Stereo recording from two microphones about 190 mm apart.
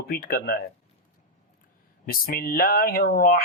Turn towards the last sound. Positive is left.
turn(degrees=50)  # may be behind; listen again after turning